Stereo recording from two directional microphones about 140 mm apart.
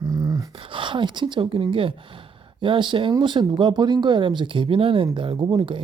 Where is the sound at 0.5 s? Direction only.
40° right (ahead or behind).